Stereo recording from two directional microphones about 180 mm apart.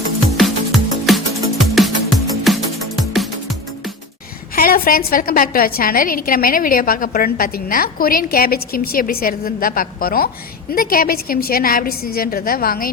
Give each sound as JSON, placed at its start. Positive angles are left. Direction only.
{"t": 0.3, "sound": "music", "side_deg": 0}
{"t": 4.5, "sound": "a woman's voice", "side_deg": 55}